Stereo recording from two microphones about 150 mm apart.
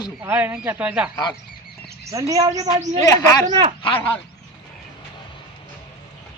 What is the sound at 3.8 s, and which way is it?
Speech, 35° left (ahead or behind).